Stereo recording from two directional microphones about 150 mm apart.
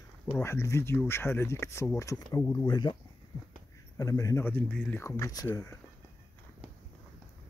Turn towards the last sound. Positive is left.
turn(degrees=20)  # may be behind; listen again after turning